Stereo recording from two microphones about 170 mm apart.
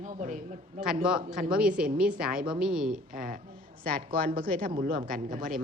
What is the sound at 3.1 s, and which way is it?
Speech, 55° right (ahead or behind).